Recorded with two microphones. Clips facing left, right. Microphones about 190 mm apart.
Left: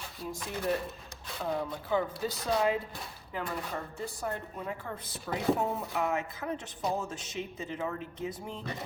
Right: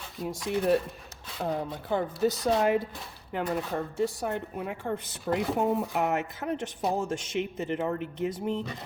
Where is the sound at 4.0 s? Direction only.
70° right (ahead or behind).